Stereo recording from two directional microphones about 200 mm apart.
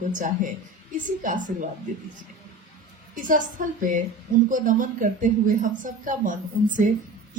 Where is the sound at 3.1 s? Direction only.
40° right (ahead or behind).